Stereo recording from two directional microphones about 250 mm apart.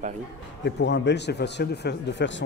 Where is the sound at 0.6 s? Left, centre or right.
Left.